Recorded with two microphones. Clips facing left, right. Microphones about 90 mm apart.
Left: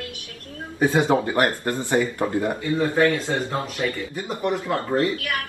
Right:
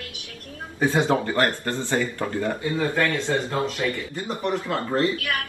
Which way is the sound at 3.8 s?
20° left (ahead or behind).